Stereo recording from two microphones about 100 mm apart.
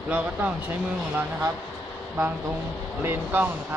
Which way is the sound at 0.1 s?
15° right (ahead or behind).